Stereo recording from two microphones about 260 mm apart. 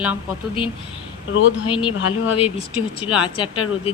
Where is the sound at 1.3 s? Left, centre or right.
Left.